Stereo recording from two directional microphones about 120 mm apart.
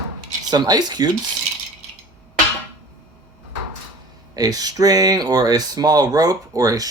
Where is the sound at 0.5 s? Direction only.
35° right (ahead or behind).